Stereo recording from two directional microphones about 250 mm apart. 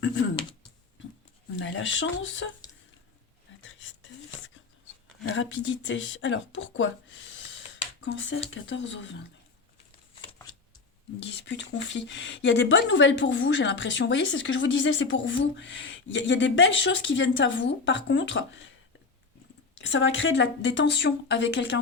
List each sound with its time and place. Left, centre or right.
1.5 s speech: left
5.3 s speech: left
11.3 s speech: left
19.9 s speech: left